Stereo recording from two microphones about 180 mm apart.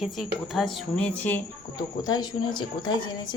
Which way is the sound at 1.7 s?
20° left (ahead or behind).